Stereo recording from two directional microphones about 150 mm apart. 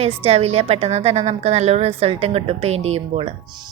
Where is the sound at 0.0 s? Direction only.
40° right (ahead or behind).